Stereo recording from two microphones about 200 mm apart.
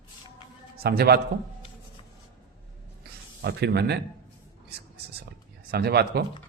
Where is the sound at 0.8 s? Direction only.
50° right (ahead or behind).